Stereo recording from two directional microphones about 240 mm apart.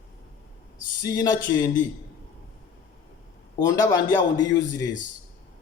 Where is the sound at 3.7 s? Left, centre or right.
Centre.